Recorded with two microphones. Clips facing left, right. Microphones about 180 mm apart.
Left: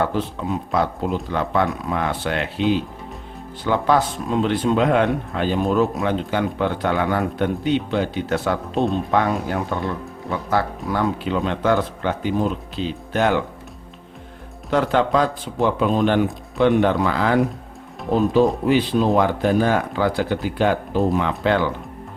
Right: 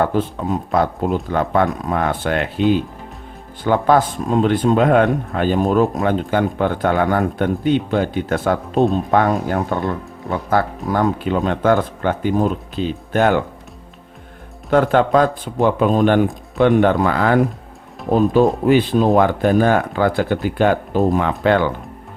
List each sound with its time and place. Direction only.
0.0 s speech: 45° right (ahead or behind)
3.6 s speech: 50° right (ahead or behind)
10.8 s speech: 45° right (ahead or behind)
14.7 s speech: 50° right (ahead or behind)